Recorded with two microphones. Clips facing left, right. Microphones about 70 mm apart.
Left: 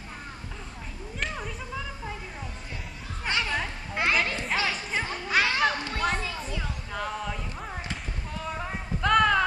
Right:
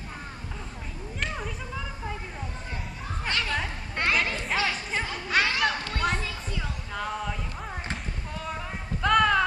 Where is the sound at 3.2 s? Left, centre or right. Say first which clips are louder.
Left 1 dB; centre.